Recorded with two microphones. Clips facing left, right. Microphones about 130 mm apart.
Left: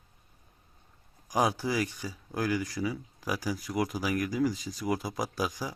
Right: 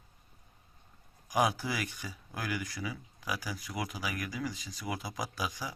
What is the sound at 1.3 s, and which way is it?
Speech, 35° left (ahead or behind).